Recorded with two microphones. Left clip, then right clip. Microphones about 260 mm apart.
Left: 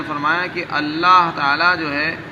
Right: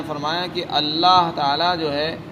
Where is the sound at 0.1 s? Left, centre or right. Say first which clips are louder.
Left 5 dB; right.